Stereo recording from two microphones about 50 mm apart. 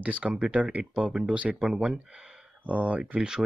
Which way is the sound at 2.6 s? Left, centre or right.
Right.